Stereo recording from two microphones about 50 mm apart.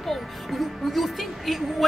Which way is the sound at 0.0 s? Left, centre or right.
Centre.